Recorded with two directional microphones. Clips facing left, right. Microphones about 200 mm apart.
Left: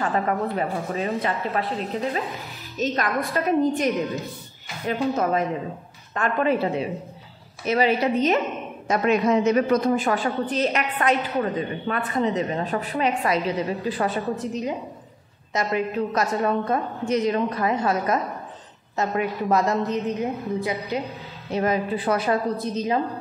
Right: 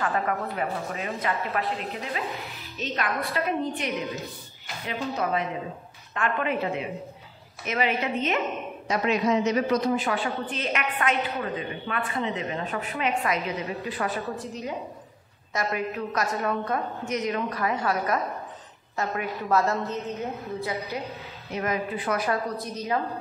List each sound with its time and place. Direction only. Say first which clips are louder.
0.0 s a woman's voice: left 4 dB; 30° left (ahead or behind)
8.8 s a woman's voice: left 4 dB; 50° left (ahead or behind); by 21.0 s 15° left (ahead or behind)
21.5 s a woman's voice: left 5 dB; 30° left (ahead or behind)